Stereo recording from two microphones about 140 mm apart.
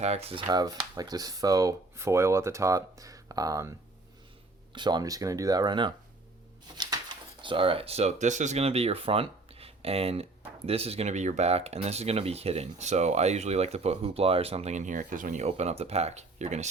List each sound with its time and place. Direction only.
0.0 s speech: 50° right (ahead or behind)
0.4 s speech: 25° right (ahead or behind)
7.4 s speech: 40° right (ahead or behind); by 15.4 s 70° right (ahead or behind)
15.4 s speech: 50° right (ahead or behind)